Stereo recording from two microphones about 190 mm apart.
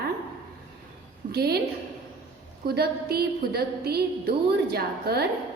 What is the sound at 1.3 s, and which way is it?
Speech, 55° right (ahead or behind).